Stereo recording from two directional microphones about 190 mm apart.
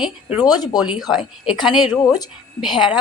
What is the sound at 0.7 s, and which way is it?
A woman's voice, 5° right (ahead or behind).